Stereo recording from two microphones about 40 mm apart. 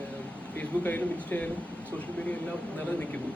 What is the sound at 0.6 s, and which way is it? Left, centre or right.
Speech, left.